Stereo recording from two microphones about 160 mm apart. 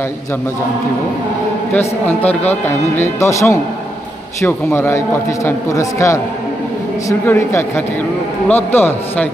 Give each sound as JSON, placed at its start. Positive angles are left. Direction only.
{"t": 1.7, "sound": "a man's voice", "side_deg": 10}